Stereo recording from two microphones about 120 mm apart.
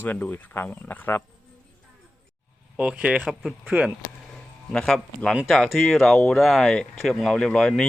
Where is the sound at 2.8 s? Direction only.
10° right (ahead or behind).